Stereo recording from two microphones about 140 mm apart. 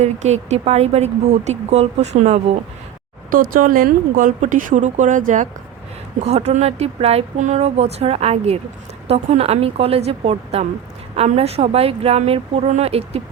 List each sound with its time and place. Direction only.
0.0 s a woman's voice: 50° right (ahead or behind)
3.2 s speech: 80° right
6.2 s a woman's voice: 50° right (ahead or behind)